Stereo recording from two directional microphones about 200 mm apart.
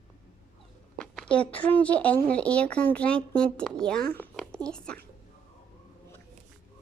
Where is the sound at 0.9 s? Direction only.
5° left (ahead or behind).